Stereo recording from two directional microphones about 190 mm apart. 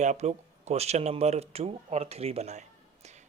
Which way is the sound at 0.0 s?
35° right (ahead or behind).